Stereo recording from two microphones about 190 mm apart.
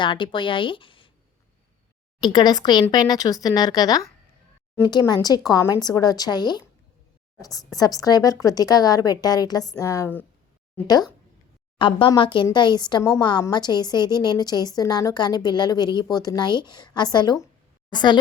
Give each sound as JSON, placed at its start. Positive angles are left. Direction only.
{"t": 0.0, "sound": "a woman's voice", "side_deg": 25}
{"t": 2.2, "sound": "a woman's voice", "side_deg": 20}
{"t": 11.8, "sound": "a woman's voice", "side_deg": 25}